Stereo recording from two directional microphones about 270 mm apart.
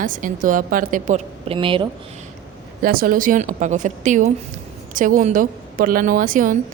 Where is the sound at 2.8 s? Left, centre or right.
Right.